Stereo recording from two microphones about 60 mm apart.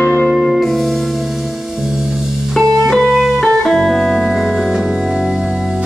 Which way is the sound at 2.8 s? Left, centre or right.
Centre.